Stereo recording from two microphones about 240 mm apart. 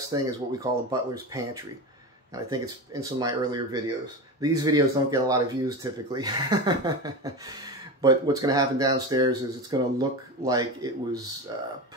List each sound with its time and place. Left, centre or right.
0.1 s speech: centre